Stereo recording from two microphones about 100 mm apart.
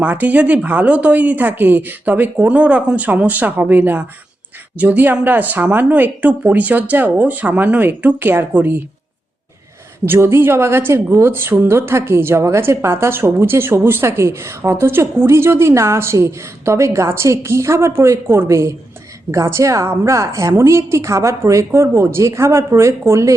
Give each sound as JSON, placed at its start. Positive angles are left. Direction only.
{"t": 0.0, "sound": "speech", "side_deg": -15}
{"t": 10.1, "sound": "a woman's voice", "side_deg": -25}